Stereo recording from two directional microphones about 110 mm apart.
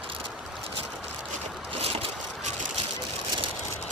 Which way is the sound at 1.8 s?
65° right (ahead or behind).